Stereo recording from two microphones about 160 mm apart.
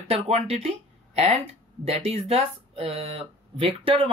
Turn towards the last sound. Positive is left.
turn(degrees=-35)  # may be behind; listen again after turning